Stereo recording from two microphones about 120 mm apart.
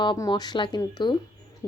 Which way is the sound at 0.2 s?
35° left (ahead or behind).